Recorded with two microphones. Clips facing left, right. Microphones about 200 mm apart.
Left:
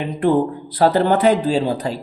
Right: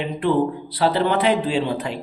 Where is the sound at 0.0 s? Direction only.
45° left (ahead or behind).